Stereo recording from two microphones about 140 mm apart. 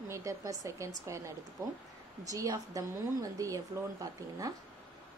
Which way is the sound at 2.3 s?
25° right (ahead or behind).